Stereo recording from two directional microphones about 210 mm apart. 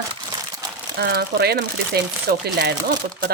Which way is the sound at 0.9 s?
50° right (ahead or behind).